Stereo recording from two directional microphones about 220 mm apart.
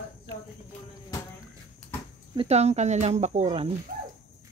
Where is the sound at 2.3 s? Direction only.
30° right (ahead or behind).